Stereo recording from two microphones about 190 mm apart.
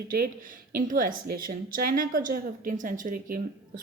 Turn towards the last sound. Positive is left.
turn(degrees=-50)  # may be behind; listen again after turning